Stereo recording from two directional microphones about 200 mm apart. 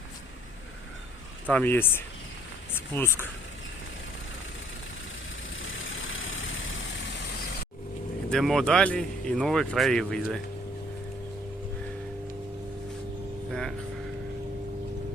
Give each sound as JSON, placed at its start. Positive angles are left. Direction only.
{"t": 1.5, "sound": "speech", "side_deg": 10}
{"t": 5.7, "sound": "vehicle", "side_deg": 80}
{"t": 8.3, "sound": "speech", "side_deg": 0}
{"t": 13.5, "sound": "vehicle", "side_deg": 0}